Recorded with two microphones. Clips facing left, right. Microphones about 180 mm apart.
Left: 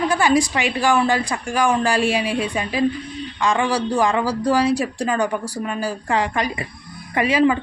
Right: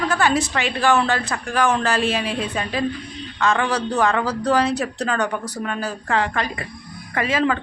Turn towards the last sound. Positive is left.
turn(degrees=10)  # may be behind; listen again after turning